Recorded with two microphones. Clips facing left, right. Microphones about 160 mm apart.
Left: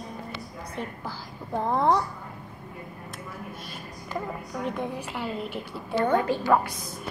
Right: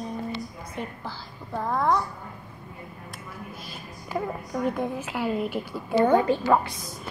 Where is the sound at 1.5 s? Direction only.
20° left (ahead or behind).